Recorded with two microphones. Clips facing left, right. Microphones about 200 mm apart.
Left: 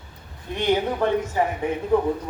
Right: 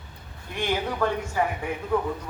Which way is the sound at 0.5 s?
20° left (ahead or behind).